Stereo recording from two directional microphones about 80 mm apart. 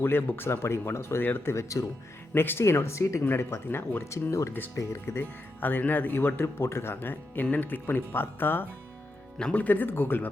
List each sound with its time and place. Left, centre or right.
0.0 s speech: left
1.5 s speech: left
2.3 s speech: left
9.4 s speech: centre